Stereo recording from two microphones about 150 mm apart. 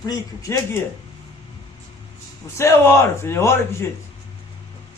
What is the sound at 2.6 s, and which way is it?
Speech, 20° left (ahead or behind).